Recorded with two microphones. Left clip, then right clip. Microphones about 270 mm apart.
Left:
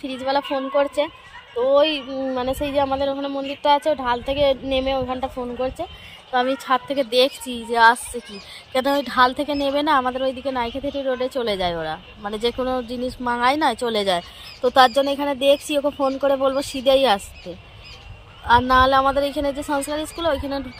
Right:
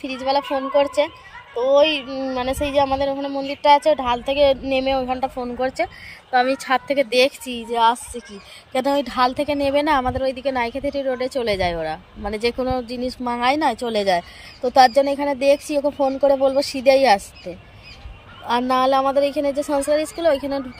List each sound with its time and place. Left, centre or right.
0.0 s a woman's voice: left
0.8 s a woman's voice: centre
18.5 s a woman's voice: centre